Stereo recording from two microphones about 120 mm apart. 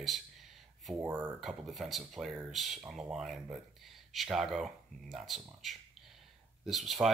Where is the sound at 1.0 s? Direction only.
15° right (ahead or behind).